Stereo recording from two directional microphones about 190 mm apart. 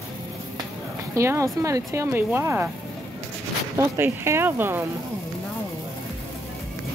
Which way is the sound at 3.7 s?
15° right (ahead or behind).